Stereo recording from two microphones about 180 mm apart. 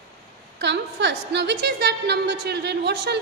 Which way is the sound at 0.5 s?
70° right (ahead or behind).